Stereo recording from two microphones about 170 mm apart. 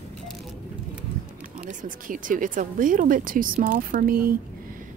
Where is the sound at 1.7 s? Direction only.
50° right (ahead or behind).